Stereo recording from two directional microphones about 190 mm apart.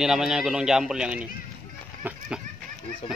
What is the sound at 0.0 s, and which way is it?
A man's voice, 5° right (ahead or behind).